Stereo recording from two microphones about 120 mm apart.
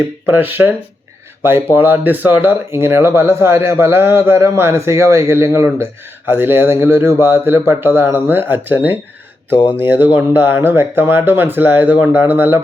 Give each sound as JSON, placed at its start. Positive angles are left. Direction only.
{"t": 0.4, "sound": "speech", "side_deg": -15}
{"t": 1.7, "sound": "speech", "side_deg": -15}
{"t": 9.5, "sound": "speech", "side_deg": 45}
{"t": 9.7, "sound": "speech", "side_deg": -15}